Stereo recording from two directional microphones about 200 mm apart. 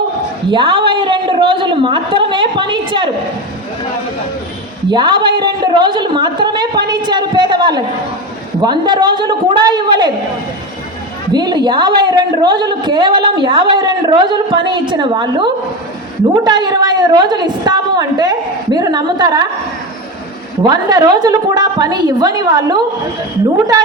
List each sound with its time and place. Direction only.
0.5 s a man's voice: 25° right (ahead or behind)
4.9 s a woman's voice: 25° right (ahead or behind)
11.3 s a woman's voice: 20° right (ahead or behind)
20.7 s a woman's voice: 20° right (ahead or behind)